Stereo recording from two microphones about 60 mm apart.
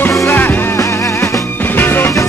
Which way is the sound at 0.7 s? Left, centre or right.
Left.